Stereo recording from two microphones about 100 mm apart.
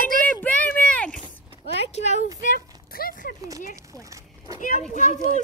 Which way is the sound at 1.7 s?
90° left.